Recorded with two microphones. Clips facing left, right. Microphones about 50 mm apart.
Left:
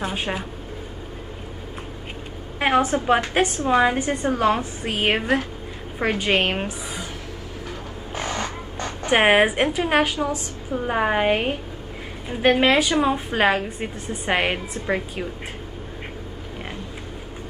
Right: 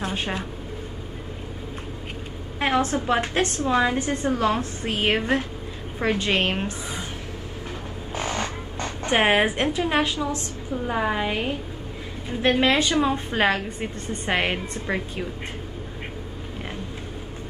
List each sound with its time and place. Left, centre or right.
0.0 s a woman's voice: centre
2.6 s a woman's voice: left
8.1 s a sound: left
9.1 s a woman's voice: left
12.3 s a woman's voice: centre